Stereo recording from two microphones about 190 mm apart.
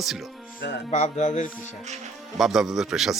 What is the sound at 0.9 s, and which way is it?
Speech, 35° left (ahead or behind).